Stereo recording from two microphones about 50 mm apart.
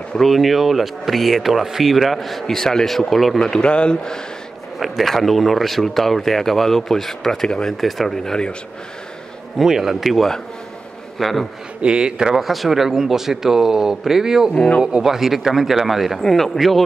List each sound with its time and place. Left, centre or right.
0.3 s speech: centre
4.7 s speech: centre
7.4 s a man's voice: centre
7.7 s speech: centre
8.2 s a man's voice: centre
9.6 s speech: centre
11.8 s speech: centre
12.4 s speech: centre